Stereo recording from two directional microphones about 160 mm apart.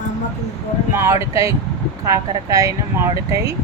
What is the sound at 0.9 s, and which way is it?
Speech, 15° right (ahead or behind).